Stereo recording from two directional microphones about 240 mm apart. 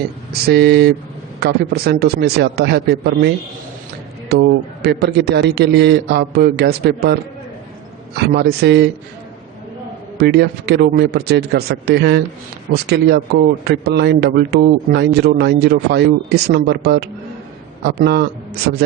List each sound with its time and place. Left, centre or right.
0.4 s a man's voice: right
10.2 s a man's voice: right